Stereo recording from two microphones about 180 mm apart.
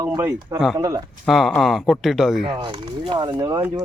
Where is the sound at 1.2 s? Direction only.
Centre (ahead or behind).